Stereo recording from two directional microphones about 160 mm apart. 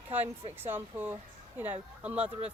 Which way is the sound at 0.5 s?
15° right (ahead or behind).